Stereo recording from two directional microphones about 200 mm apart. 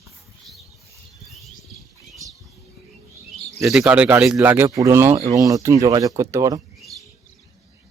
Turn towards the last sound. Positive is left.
turn(degrees=-15)  # may be behind; listen again after turning